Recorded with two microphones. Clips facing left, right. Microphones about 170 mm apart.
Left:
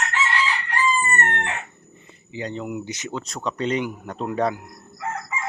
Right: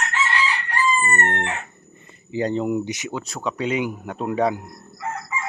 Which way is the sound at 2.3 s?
40° right (ahead or behind).